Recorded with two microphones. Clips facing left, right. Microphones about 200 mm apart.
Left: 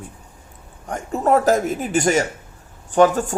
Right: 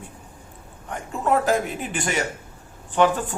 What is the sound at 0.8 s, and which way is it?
Speech, 40° left (ahead or behind).